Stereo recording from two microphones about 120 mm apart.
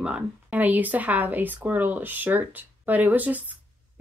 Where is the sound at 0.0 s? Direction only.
10° right (ahead or behind).